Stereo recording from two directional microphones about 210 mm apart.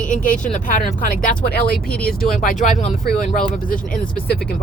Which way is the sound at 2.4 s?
40° left (ahead or behind).